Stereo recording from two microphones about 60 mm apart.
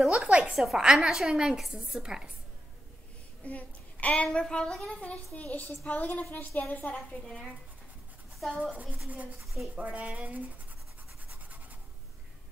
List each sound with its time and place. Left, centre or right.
0.1 s a woman's voice: right
0.5 s a woman's voice: centre
3.4 s a child's voice: left
5.0 s a child's voice: left
8.4 s speech: centre
8.7 s a sound: right